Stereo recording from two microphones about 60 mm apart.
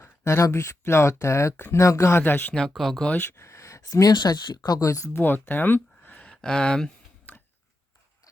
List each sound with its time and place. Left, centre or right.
0.3 s speech: left
1.5 s speech: left
1.8 s speech: left
2.6 s speech: centre
3.2 s speech: left
4.8 s speech: left
5.1 s speech: left
6.2 s speech: centre
7.3 s a sound: left